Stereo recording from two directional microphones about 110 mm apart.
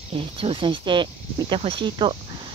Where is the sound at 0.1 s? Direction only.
60° right (ahead or behind).